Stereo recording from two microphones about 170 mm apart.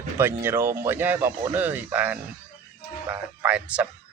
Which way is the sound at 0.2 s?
15° right (ahead or behind).